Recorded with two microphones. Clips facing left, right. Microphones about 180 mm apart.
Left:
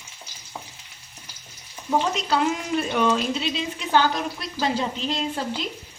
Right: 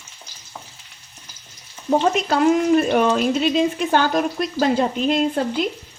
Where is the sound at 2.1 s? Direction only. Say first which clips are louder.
Right 7 dB; 50° right (ahead or behind).